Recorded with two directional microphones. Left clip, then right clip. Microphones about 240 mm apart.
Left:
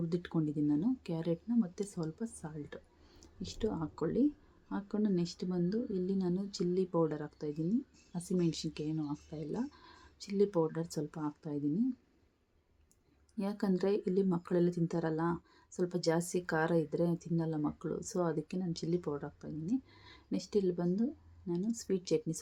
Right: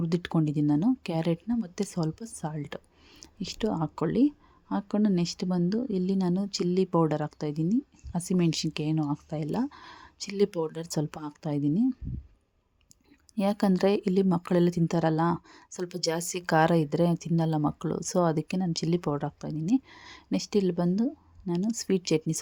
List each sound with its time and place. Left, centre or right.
0.1 s speech: right
13.3 s speech: right